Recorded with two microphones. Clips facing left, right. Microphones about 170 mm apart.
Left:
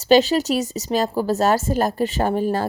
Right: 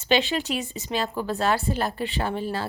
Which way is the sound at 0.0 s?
40° left (ahead or behind).